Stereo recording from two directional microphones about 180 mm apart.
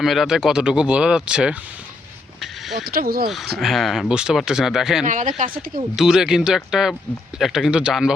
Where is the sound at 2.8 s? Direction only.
55° right (ahead or behind).